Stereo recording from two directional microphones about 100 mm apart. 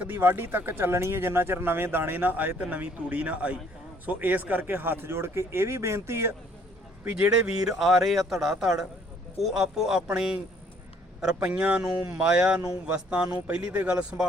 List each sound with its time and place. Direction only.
0.0 s speech: 20° right (ahead or behind)
7.0 s a man's voice: 10° right (ahead or behind)